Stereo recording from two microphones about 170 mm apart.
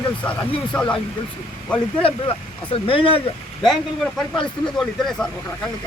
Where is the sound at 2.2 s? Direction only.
30° left (ahead or behind).